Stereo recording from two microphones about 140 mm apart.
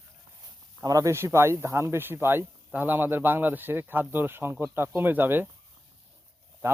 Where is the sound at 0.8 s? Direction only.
25° right (ahead or behind).